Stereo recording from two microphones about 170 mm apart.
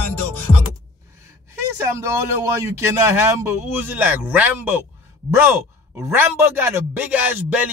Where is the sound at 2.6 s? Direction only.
15° right (ahead or behind).